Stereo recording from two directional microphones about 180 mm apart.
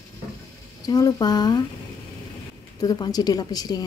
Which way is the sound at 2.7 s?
20° left (ahead or behind).